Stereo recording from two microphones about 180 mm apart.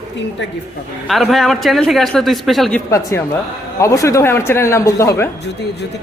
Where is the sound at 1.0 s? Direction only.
Centre (ahead or behind).